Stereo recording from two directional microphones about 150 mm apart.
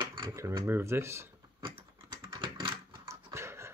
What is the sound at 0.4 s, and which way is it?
Speech, 20° right (ahead or behind).